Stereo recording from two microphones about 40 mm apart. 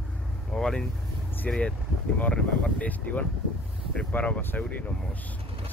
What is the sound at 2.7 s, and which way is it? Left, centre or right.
Speech, left.